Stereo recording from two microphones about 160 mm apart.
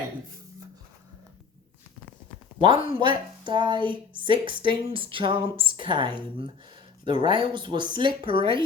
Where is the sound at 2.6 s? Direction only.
35° right (ahead or behind).